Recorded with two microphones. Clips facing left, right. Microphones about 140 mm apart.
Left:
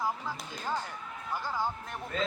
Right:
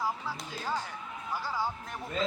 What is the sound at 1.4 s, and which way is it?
Speech, 15° left (ahead or behind).